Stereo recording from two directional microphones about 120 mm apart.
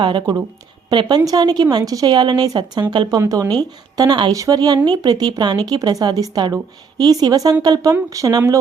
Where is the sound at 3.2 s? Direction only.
30° right (ahead or behind).